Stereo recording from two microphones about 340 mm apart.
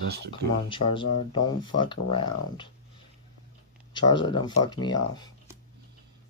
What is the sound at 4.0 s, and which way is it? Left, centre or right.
Speech, centre.